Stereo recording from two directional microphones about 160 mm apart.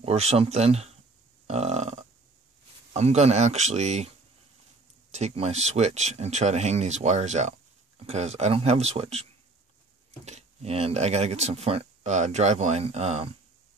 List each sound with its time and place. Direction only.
0.0 s speech: 40° right (ahead or behind)
1.5 s burping: 45° right (ahead or behind)
2.9 s speech: 40° right (ahead or behind)
5.1 s speech: 40° right (ahead or behind)
10.2 s speech: 40° right (ahead or behind)